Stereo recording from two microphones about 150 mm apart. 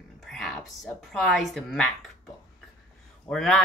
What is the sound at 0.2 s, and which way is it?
A woman's voice, centre (ahead or behind).